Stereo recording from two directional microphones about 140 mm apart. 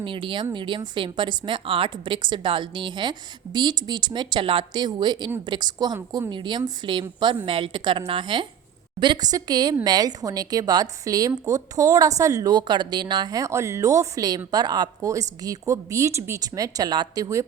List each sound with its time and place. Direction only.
0.0 s a woman's voice: 35° right (ahead or behind)